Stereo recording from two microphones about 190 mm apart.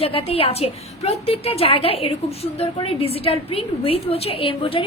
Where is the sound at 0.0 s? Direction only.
30° left (ahead or behind).